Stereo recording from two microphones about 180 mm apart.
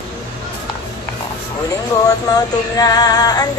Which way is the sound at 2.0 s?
20° left (ahead or behind).